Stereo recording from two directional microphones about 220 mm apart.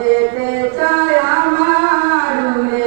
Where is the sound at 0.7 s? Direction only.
20° right (ahead or behind).